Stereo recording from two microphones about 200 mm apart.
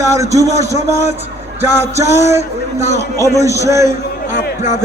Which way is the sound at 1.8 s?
15° right (ahead or behind).